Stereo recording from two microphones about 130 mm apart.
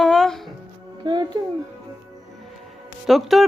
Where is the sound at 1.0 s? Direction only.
35° right (ahead or behind).